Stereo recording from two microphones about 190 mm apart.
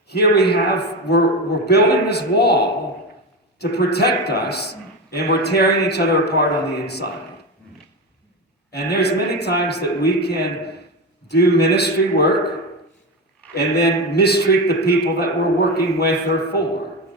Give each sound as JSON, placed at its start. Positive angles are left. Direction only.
{"t": 0.1, "sound": "a man's voice", "side_deg": 60}
{"t": 8.7, "sound": "a man's voice", "side_deg": 60}
{"t": 13.5, "sound": "a man's voice", "side_deg": 60}